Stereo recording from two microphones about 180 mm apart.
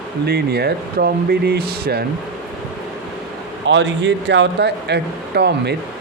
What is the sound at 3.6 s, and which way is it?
Speech, 85° right.